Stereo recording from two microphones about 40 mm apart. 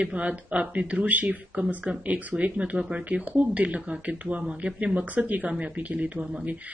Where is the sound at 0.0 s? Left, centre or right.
Right.